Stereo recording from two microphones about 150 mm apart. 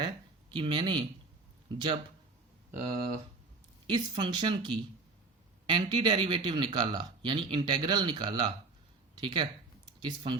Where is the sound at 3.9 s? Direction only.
30° right (ahead or behind).